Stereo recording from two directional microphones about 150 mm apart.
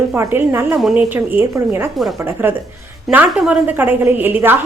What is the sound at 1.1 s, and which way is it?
A woman's voice, 15° right (ahead or behind).